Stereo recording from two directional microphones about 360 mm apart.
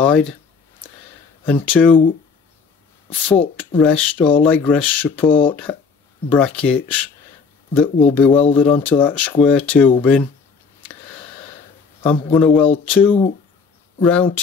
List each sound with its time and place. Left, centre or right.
0.0 s speech: centre
1.4 s speech: centre
3.3 s speech: centre
12.0 s speech: centre